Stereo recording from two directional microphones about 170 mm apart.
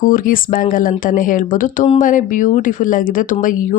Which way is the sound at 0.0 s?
55° left (ahead or behind).